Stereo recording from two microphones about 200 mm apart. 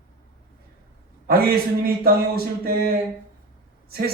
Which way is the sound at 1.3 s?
50° right (ahead or behind).